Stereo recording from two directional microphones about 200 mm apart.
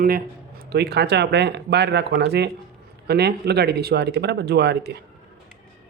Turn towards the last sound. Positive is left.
turn(degrees=-55)  # may be behind; listen again after turning